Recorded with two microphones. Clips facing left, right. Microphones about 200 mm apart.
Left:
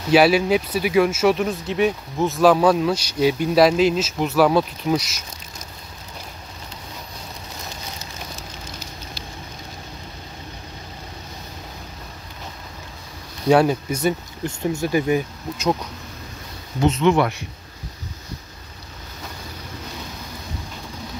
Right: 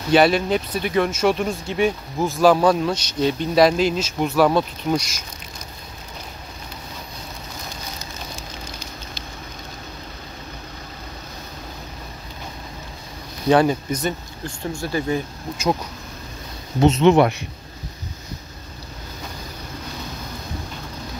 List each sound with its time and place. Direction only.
0.1 s speech: 5° left (ahead or behind)
8.4 s a sound: 5° left (ahead or behind)
13.5 s speech: 5° left (ahead or behind)
14.4 s speech: 20° left (ahead or behind)
16.8 s speech: 25° right (ahead or behind)